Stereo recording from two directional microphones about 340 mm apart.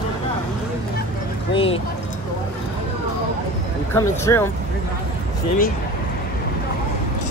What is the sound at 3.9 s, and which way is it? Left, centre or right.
Speech, centre.